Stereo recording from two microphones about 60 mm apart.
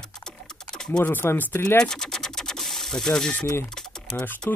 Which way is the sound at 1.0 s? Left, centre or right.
Left.